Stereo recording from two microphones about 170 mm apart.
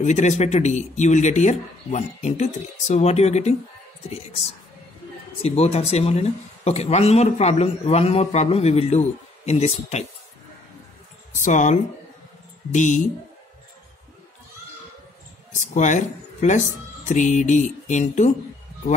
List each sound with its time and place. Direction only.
0.0 s speech: 45° left (ahead or behind)
5.4 s speech: 35° left (ahead or behind)
11.3 s speech: 45° left (ahead or behind)
15.6 s speech: 45° left (ahead or behind)